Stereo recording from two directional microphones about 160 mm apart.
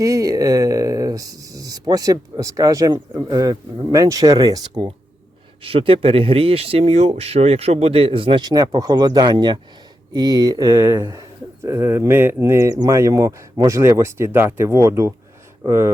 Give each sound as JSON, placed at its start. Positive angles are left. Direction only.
{"t": 0.0, "sound": "speech", "side_deg": -20}